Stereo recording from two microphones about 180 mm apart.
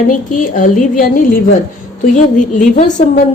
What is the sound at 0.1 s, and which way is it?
A woman's voice, 45° left (ahead or behind).